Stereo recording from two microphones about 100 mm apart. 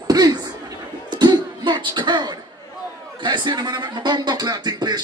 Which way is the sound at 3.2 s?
50° right (ahead or behind).